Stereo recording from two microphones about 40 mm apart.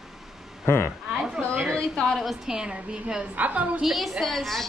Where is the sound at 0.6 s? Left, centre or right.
Left.